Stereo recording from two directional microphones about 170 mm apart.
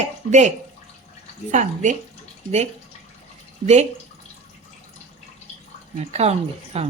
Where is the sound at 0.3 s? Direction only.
45° right (ahead or behind).